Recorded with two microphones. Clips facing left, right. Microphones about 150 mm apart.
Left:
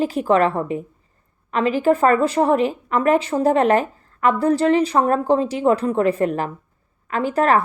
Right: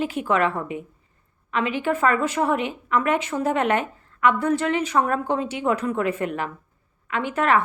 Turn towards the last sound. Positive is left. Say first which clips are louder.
# left 4 dB
turn(degrees=40)  # may be behind; listen again after turning